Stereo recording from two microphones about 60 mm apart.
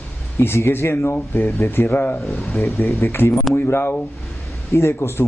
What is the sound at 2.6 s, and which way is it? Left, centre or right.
Speech, left.